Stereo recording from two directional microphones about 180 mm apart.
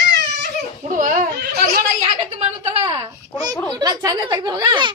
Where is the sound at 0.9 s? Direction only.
45° right (ahead or behind).